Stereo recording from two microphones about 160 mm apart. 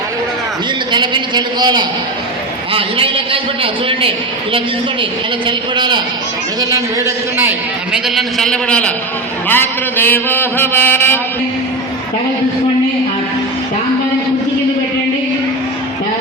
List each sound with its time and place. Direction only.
0.9 s a man's voice: 30° right (ahead or behind)
5.5 s a man's voice: 30° right (ahead or behind)
7.9 s a man's voice: centre (ahead or behind)
9.5 s a sound: 10° left (ahead or behind)